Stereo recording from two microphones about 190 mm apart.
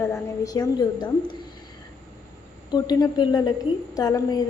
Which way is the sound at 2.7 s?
20° left (ahead or behind).